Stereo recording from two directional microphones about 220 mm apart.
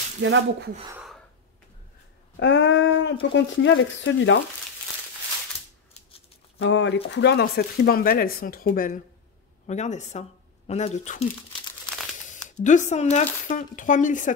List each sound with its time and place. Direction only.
0.2 s speech: 55° right (ahead or behind)
2.3 s speech: 55° left (ahead or behind)
6.6 s speech: 55° left (ahead or behind); by 11.2 s 30° left (ahead or behind)
12.4 s speech: 35° left (ahead or behind)